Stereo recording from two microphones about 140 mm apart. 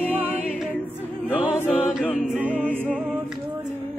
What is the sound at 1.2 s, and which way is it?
Choir, 10° right (ahead or behind).